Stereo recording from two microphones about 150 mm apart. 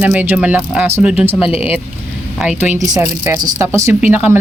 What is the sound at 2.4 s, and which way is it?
Speech, 10° right (ahead or behind).